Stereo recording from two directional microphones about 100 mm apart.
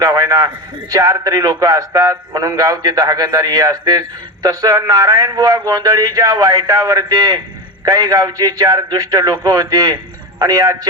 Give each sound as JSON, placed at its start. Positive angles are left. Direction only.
{"t": 0.0, "sound": "a man's voice", "side_deg": -40}